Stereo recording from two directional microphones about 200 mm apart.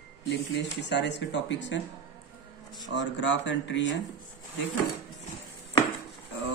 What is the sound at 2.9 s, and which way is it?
Speech, 65° left (ahead or behind).